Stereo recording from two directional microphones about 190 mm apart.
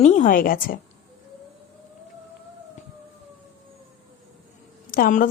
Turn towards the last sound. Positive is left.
turn(degrees=45)  # may be behind; listen again after turning